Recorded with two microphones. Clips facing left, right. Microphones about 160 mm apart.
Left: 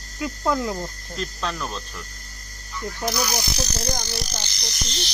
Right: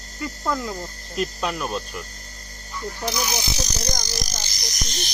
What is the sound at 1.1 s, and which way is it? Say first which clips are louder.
Speech: right 5 dB; 15° right (ahead or behind).